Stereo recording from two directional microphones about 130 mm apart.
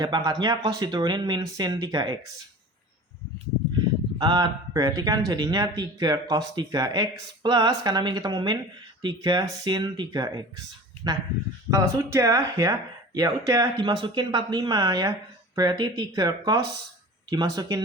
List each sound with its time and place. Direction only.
0.0 s speech: 30° right (ahead or behind)
4.2 s speech: 30° right (ahead or behind)
11.7 s speech: 20° right (ahead or behind)